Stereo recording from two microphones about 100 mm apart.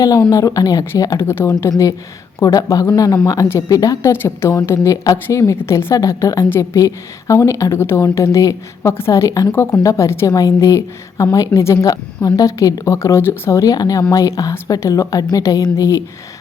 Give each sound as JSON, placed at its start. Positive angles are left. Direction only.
{"t": 0.3, "sound": "a woman's voice", "side_deg": 35}
{"t": 1.3, "sound": "a woman's voice", "side_deg": 25}
{"t": 2.4, "sound": "a woman's voice", "side_deg": 35}
{"t": 4.1, "sound": "a woman's voice", "side_deg": 25}